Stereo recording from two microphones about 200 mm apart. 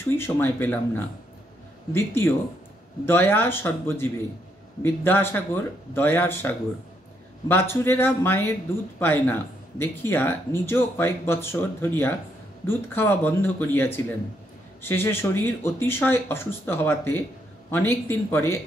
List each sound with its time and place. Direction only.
0.2 s speech: 10° left (ahead or behind)